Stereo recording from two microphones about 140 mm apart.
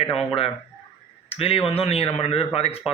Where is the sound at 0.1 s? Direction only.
5° left (ahead or behind).